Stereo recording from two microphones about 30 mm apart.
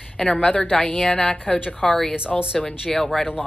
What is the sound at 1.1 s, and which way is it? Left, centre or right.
Speech, left.